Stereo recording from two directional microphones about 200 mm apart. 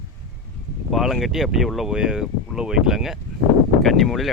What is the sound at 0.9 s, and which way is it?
Speech, centre (ahead or behind).